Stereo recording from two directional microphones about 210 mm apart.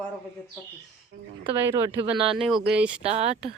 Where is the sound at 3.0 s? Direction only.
30° right (ahead or behind).